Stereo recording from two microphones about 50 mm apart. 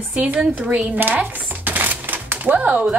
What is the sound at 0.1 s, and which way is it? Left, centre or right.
A woman's voice, right.